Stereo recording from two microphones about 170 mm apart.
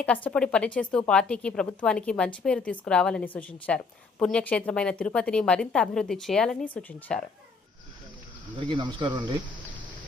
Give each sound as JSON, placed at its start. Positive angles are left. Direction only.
{"t": 0.0, "sound": "a woman's voice", "side_deg": 10}
{"t": 8.5, "sound": "speech", "side_deg": -30}